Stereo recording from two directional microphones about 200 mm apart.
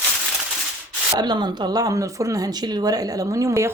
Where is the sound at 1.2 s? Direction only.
20° right (ahead or behind).